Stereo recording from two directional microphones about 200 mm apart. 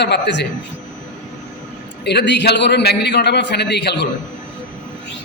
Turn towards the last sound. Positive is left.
turn(degrees=55)  # may be behind; listen again after turning